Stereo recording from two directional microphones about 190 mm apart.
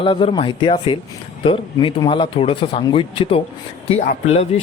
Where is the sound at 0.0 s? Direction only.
30° left (ahead or behind).